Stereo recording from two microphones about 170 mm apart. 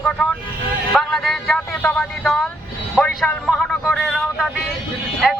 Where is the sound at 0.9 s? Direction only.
Centre (ahead or behind).